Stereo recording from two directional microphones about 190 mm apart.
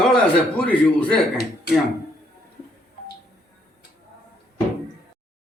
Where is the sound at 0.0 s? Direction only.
5° left (ahead or behind).